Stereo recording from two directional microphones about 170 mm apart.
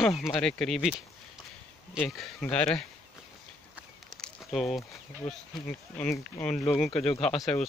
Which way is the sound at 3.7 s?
Centre (ahead or behind).